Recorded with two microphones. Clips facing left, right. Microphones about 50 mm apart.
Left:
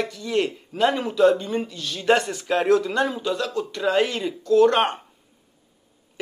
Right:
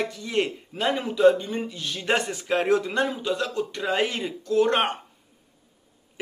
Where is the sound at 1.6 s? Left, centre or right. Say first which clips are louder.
Left 5 dB; centre.